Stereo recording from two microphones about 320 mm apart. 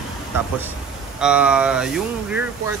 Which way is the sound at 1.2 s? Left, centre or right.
Centre.